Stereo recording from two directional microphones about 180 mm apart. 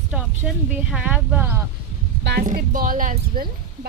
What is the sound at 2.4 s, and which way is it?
Speech, 45° right (ahead or behind).